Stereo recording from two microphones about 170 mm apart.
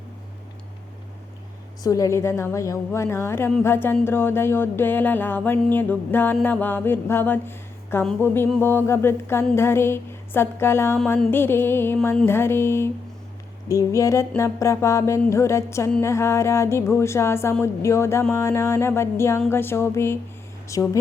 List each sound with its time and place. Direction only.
1.8 s music: 20° left (ahead or behind)
20.7 s a woman's voice: 20° left (ahead or behind)